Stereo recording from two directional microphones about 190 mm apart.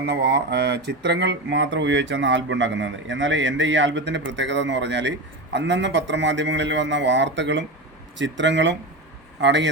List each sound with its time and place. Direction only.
0.0 s speech: 60° right (ahead or behind)